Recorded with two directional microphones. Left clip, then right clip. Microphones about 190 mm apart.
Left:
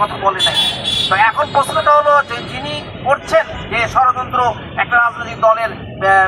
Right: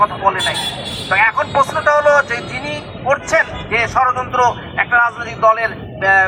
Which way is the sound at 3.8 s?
20° right (ahead or behind).